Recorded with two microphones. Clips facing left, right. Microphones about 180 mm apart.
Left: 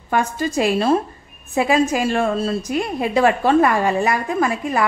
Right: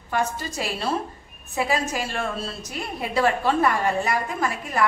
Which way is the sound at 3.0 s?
75° left (ahead or behind).